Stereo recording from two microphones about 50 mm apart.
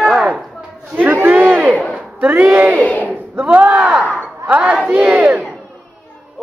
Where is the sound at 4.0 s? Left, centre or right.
Right.